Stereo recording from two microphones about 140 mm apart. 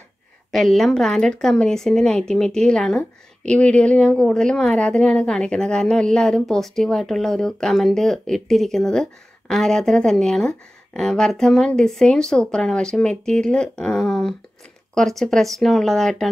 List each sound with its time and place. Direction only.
0.5 s speech: centre (ahead or behind)